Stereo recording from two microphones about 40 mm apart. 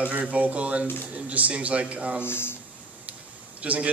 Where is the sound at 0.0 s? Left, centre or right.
Right.